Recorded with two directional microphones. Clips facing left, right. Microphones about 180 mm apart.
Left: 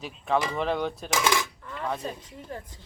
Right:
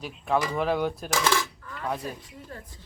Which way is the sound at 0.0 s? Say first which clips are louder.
Even; 5° right (ahead or behind).